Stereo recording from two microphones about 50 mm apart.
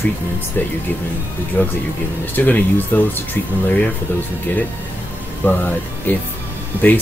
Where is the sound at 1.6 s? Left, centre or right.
Left.